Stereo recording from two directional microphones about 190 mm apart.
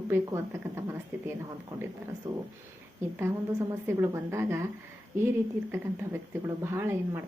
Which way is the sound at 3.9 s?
15° right (ahead or behind).